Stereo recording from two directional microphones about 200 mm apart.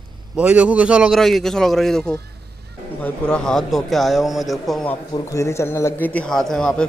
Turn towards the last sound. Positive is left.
turn(degrees=5)  # may be behind; listen again after turning